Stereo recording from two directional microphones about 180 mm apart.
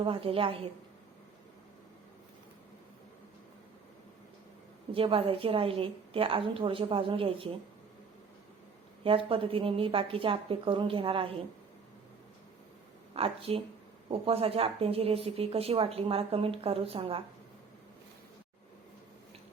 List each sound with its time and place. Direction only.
0.0 s speech: 30° right (ahead or behind)
4.9 s a woman's voice: 30° right (ahead or behind)
9.0 s a woman's voice: 30° right (ahead or behind)
13.1 s speech: 30° right (ahead or behind)